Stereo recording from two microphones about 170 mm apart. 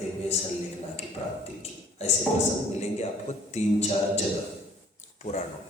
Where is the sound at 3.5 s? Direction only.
40° left (ahead or behind).